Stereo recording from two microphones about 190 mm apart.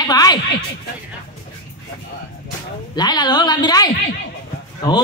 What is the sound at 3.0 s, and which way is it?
A man's voice, 20° left (ahead or behind).